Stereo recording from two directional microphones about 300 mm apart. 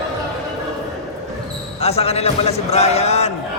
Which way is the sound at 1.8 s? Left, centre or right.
Centre.